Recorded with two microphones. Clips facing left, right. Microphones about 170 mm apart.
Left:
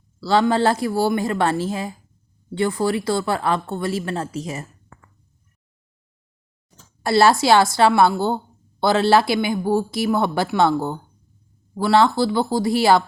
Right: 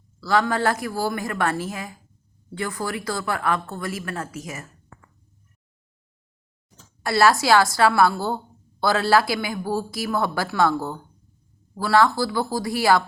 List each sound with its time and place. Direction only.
0.2 s speech: 30° left (ahead or behind)
7.0 s speech: 25° left (ahead or behind)